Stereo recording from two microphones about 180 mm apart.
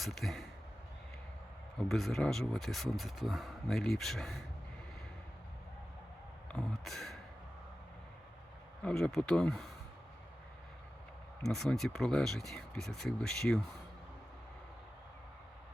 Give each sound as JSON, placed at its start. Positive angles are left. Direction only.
{"t": 0.0, "sound": "speech", "side_deg": 0}
{"t": 1.9, "sound": "speech", "side_deg": 0}
{"t": 6.5, "sound": "a sound", "side_deg": 5}
{"t": 8.8, "sound": "speech", "side_deg": 5}
{"t": 11.4, "sound": "speech", "side_deg": 0}